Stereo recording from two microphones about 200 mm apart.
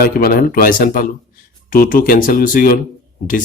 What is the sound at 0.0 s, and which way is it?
Speech, 45° left (ahead or behind).